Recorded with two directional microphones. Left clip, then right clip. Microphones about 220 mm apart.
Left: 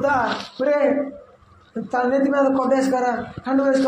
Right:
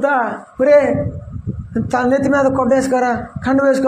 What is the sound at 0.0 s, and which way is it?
Speech, 50° right (ahead or behind).